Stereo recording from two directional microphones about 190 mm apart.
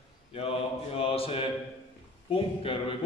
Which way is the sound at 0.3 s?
30° left (ahead or behind).